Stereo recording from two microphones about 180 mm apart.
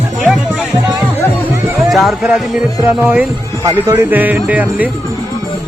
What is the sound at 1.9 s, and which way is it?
Speech, centre (ahead or behind).